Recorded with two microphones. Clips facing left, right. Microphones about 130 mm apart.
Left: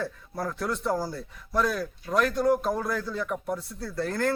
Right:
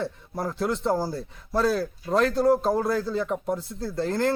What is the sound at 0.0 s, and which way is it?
A man's voice, 25° right (ahead or behind).